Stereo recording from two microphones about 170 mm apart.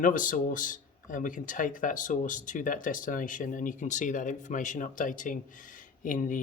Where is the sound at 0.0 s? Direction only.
50° left (ahead or behind).